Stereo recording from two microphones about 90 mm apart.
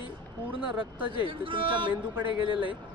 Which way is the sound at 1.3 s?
70° right (ahead or behind).